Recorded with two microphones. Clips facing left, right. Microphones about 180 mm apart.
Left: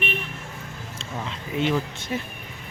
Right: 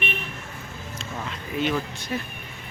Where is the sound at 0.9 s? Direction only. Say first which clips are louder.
Left 1 dB; 25° left (ahead or behind).